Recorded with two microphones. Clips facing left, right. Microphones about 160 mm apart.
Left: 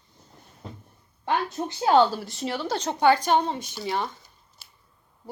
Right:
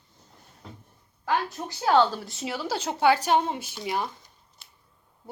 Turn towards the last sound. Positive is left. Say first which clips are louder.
# left 1 dB
turn(degrees=0)  # may be behind; listen again after turning